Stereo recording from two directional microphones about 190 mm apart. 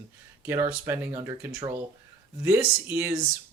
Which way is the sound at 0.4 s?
15° right (ahead or behind).